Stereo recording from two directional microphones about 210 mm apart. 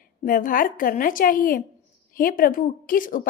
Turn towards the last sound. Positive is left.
turn(degrees=40)  # may be behind; listen again after turning